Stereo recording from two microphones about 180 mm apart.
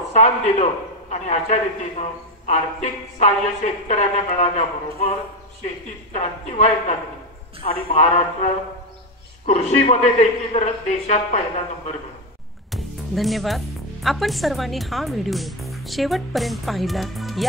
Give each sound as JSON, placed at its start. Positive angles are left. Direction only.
{"t": 0.1, "sound": "a man's voice", "side_deg": 40}
{"t": 6.1, "sound": "a man's voice", "side_deg": 40}
{"t": 9.5, "sound": "a man's voice", "side_deg": 40}
{"t": 12.7, "sound": "music", "side_deg": 0}
{"t": 14.0, "sound": "speech", "side_deg": 0}